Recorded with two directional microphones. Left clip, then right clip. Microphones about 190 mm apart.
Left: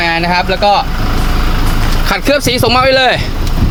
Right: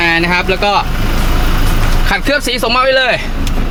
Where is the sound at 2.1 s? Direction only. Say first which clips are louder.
Left 2 dB; 20° left (ahead or behind).